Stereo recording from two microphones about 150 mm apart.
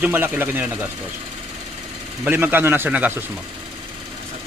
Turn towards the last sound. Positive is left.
turn(degrees=-10)  # may be behind; listen again after turning